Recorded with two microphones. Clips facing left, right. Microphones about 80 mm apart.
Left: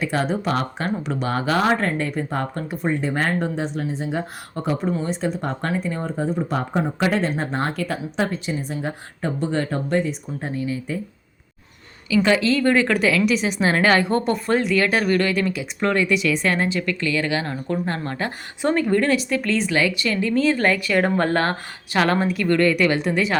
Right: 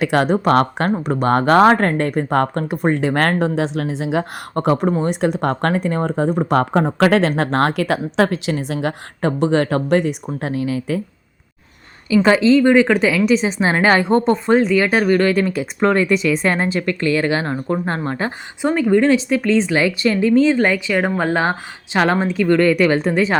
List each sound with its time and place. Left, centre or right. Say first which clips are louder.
0.0 s speech: right 7 dB; right
0.9 s speech: right 7 dB; right
12.1 s a woman's voice: right 6 dB; right
15.3 s speech: right 5 dB; right
18.6 s a woman's voice: right 4 dB; centre
22.7 s speech: right 4 dB; right